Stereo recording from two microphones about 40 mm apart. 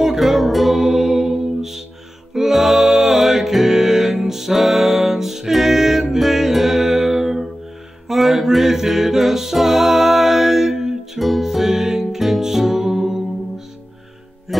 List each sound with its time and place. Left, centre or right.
0.0 s music: centre
14.5 s music: centre